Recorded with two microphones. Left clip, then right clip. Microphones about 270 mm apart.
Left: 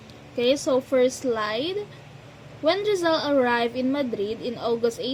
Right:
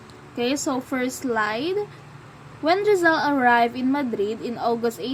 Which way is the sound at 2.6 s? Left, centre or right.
Centre.